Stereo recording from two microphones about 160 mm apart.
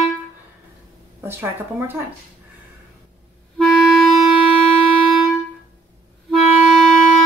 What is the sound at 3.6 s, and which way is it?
Clarinet, centre (ahead or behind).